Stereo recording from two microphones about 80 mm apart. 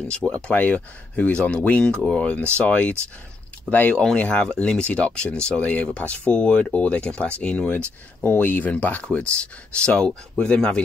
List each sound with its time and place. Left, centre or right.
0.1 s speech: centre